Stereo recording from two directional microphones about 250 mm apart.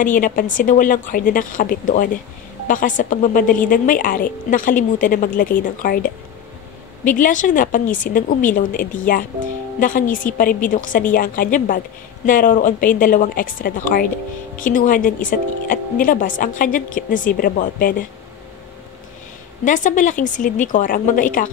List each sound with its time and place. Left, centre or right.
0.0 s a woman's voice: left
19.6 s a woman's voice: left